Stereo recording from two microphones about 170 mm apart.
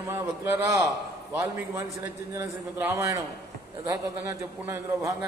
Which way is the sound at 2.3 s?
15° right (ahead or behind).